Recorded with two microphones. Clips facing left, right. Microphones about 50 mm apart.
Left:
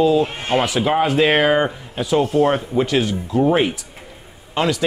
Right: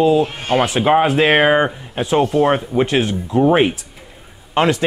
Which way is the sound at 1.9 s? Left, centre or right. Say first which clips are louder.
Right 1 dB; right.